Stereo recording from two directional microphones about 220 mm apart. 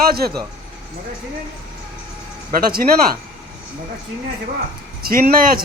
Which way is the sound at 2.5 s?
40° right (ahead or behind).